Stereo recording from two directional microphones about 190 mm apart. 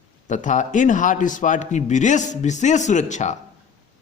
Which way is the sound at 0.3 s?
40° left (ahead or behind).